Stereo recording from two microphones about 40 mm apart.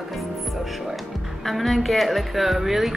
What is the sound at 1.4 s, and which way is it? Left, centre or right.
Speech, centre.